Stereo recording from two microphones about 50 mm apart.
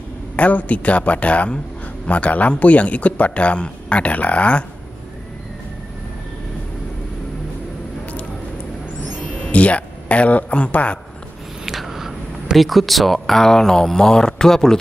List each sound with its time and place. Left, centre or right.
0.4 s a man's voice: left
9.4 s speech: left
11.6 s speech: centre